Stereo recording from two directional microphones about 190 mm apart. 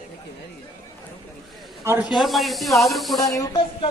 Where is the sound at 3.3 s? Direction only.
20° left (ahead or behind).